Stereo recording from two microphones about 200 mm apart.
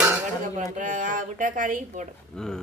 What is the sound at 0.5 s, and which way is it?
Speech, 40° right (ahead or behind).